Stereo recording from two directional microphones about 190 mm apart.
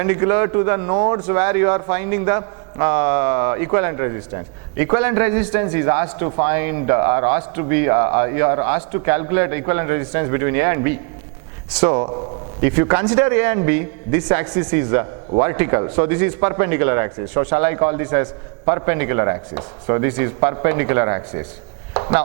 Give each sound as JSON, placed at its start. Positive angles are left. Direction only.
{"t": 0.0, "sound": "speech", "side_deg": -15}
{"t": 21.9, "sound": "chop", "side_deg": -20}